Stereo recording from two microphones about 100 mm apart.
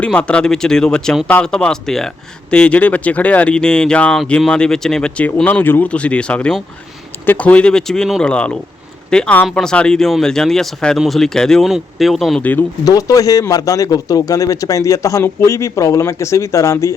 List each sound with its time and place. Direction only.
0.0 s speech: 10° left (ahead or behind)
12.4 s speech: 15° left (ahead or behind)
12.8 s a man's voice: 35° left (ahead or behind)